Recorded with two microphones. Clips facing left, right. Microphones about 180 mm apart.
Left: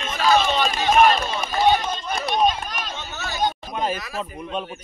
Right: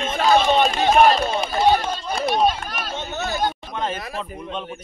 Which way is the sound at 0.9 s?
35° right (ahead or behind).